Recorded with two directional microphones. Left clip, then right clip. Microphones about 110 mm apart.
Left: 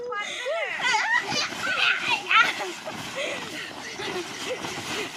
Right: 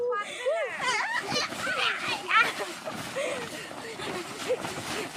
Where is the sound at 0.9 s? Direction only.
25° right (ahead or behind).